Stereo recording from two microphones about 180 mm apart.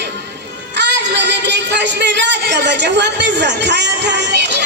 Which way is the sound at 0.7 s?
75° right (ahead or behind).